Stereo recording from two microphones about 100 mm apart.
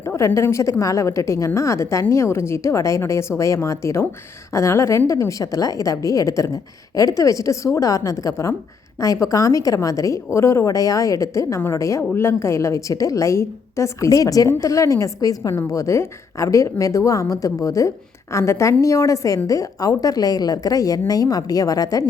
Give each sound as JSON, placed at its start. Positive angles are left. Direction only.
{"t": 0.2, "sound": "a woman's voice", "side_deg": 25}